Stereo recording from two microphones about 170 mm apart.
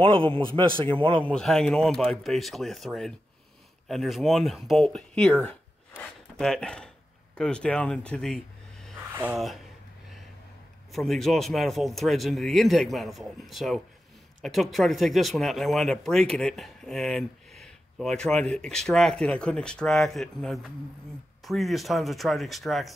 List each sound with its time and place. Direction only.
0.0 s a man's voice: 30° right (ahead or behind)
1.2 s speech: 5° left (ahead or behind)
9.1 s speech: 10° right (ahead or behind)
10.9 s speech: centre (ahead or behind)